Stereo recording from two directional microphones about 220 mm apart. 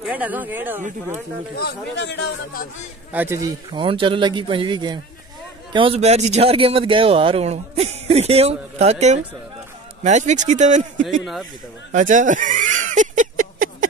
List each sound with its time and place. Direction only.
0.0 s speech: 5° right (ahead or behind)
1.6 s speech: 50° left (ahead or behind)
3.1 s speech: 5° right (ahead or behind)
3.7 s speech: 20° right (ahead or behind)
11.9 s a sound: 35° right (ahead or behind)